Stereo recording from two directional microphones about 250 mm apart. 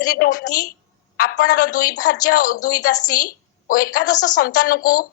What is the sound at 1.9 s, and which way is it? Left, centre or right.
A woman's voice, left.